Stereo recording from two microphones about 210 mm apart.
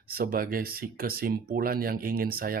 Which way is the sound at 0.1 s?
45° right (ahead or behind).